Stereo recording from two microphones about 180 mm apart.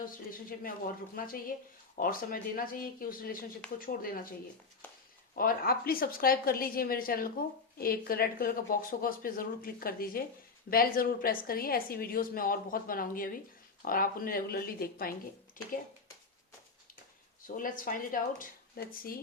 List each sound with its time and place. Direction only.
0.0 s a woman's voice: 50° left (ahead or behind)
17.4 s a woman's voice: 50° left (ahead or behind)